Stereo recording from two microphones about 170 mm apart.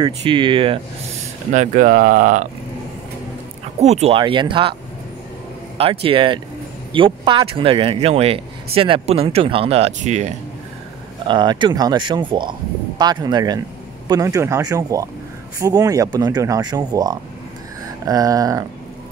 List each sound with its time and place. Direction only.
0.0 s speech: 30° right (ahead or behind)
1.5 s speech: 50° right (ahead or behind)
3.8 s speech: 40° right (ahead or behind)
4.2 s speech: 30° right (ahead or behind)
6.0 s speech: 30° right (ahead or behind)
11.2 s speech: 25° right (ahead or behind)